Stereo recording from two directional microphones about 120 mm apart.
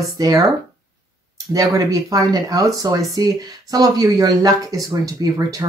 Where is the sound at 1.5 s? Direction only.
30° right (ahead or behind).